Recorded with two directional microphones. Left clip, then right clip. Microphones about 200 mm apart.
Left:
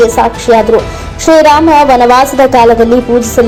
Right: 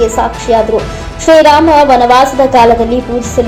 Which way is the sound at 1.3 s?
30° left (ahead or behind).